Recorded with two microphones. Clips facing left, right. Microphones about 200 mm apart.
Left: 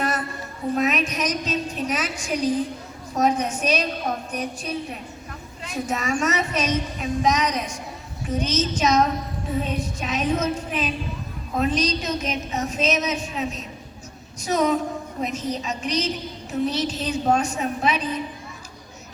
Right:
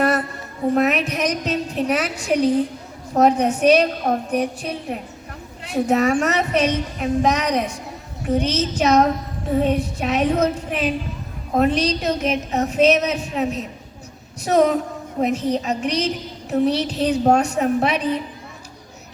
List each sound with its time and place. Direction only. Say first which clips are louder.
0.7 s a woman's voice: right 4 dB; 65° right (ahead or behind)